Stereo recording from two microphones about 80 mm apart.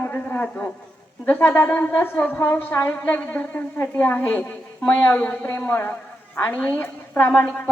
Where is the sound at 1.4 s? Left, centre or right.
Left.